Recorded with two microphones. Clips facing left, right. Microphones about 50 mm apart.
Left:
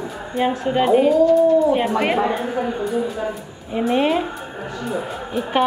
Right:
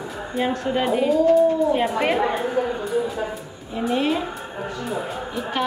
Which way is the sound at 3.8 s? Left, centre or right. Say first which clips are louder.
Left 4 dB; left.